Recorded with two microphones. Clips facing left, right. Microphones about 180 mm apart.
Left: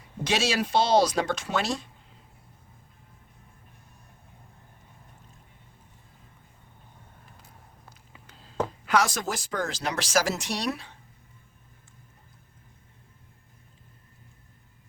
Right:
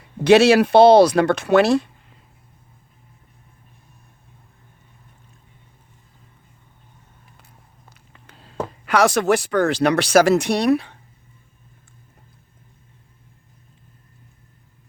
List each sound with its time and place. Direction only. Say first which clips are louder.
0.3 s speech: right 15 dB; 65° right (ahead or behind)
8.3 s a sound: right 7 dB; 65° right (ahead or behind)
8.9 s speech: right 10 dB; 65° right (ahead or behind)